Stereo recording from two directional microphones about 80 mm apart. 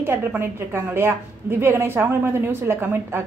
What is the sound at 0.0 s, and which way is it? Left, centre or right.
A woman's voice, right.